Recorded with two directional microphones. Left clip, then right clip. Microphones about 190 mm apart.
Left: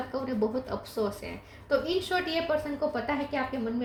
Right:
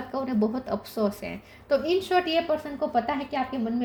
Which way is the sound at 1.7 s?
55° right (ahead or behind).